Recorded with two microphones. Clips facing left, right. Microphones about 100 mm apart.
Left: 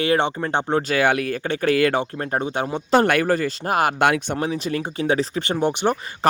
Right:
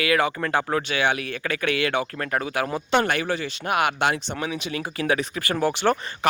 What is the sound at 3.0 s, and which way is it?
Speech, 50° left (ahead or behind).